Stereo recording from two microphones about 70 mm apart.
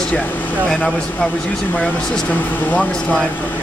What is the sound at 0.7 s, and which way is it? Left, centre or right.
Speech, centre.